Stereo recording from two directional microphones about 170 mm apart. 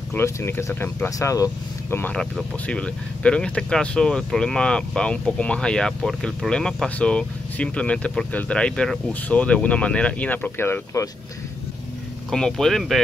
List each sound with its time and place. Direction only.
0.1 s speech: 15° left (ahead or behind)
12.3 s speech: 5° left (ahead or behind)